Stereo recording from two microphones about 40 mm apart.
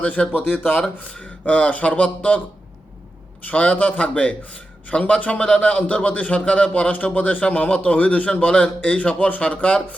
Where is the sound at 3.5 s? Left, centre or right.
Left.